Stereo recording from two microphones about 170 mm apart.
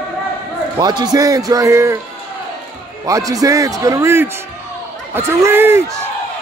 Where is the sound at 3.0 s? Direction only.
20° right (ahead or behind).